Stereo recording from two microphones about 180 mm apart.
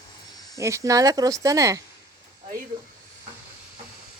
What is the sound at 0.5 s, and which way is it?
Speech, 15° right (ahead or behind).